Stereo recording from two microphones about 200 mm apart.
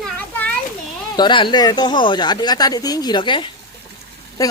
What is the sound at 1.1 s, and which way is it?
Speech, 25° left (ahead or behind).